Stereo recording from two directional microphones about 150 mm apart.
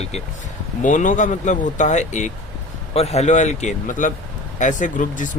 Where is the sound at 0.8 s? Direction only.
55° left (ahead or behind).